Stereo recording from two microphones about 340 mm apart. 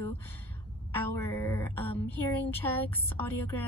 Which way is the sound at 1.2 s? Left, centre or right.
Centre.